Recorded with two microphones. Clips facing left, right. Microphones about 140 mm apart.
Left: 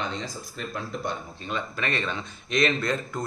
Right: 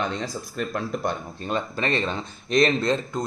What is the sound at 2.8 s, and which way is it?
Speech, 25° right (ahead or behind).